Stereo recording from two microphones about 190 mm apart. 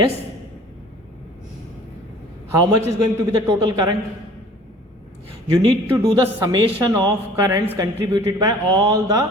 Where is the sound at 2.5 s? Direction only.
15° right (ahead or behind).